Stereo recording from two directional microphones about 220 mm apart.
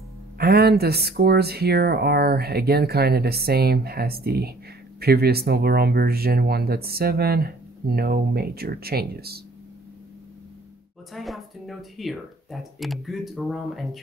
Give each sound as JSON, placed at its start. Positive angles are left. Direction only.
{"t": 0.4, "sound": "speech", "side_deg": -45}
{"t": 11.1, "sound": "speech", "side_deg": 0}